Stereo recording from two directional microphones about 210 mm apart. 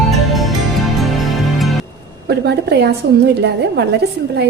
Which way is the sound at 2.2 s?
50° right (ahead or behind).